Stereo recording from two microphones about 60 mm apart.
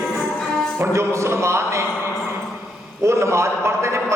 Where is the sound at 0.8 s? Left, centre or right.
Right.